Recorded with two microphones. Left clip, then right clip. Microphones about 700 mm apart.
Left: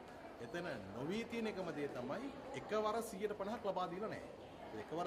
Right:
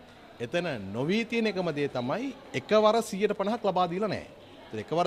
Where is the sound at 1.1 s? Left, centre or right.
Right.